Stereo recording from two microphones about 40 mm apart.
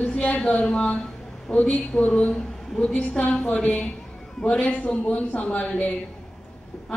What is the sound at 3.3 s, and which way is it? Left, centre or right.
A woman's voice, left.